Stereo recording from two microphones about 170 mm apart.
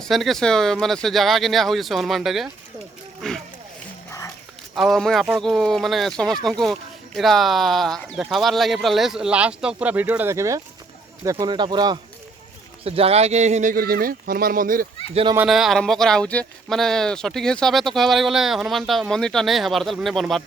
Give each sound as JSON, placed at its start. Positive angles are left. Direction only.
{"t": 0.0, "sound": "speech", "side_deg": 0}
{"t": 3.2, "sound": "vehicle", "side_deg": 0}
{"t": 4.7, "sound": "speech", "side_deg": 0}
{"t": 12.8, "sound": "speech", "side_deg": -35}
{"t": 15.1, "sound": "speech", "side_deg": -30}
{"t": 15.4, "sound": "speech", "side_deg": 0}